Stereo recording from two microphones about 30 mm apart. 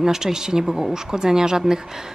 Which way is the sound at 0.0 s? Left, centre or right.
Centre.